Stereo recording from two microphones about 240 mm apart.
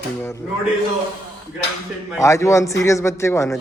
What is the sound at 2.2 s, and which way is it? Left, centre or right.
Speech, centre.